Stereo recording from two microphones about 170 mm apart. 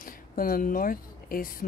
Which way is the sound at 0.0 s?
55° left (ahead or behind).